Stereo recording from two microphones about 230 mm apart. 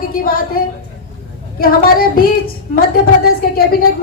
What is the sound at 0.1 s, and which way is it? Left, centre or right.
A woman's voice, left.